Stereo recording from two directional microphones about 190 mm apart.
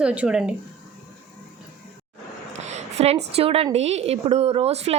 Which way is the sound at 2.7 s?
35° right (ahead or behind).